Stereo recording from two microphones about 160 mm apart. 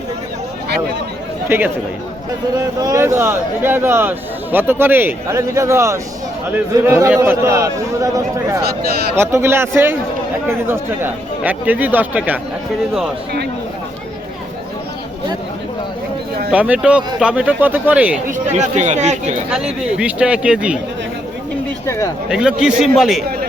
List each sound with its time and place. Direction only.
1.5 s speech: 15° right (ahead or behind)
2.8 s a man's voice: 20° right (ahead or behind)
16.5 s speech: 10° right (ahead or behind)
18.5 s speech: 45° right (ahead or behind)
19.5 s speech: 5° right (ahead or behind)
21.8 s speech: 20° left (ahead or behind)
22.3 s a man's voice: 5° right (ahead or behind)